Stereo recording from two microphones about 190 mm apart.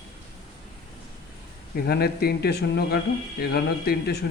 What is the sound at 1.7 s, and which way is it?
A man's voice, 55° left (ahead or behind).